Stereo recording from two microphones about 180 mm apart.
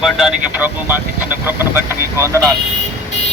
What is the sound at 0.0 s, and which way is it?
Speech, centre (ahead or behind).